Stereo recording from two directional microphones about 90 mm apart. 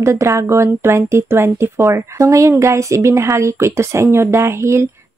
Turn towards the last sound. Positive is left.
turn(degrees=-30)  # may be behind; listen again after turning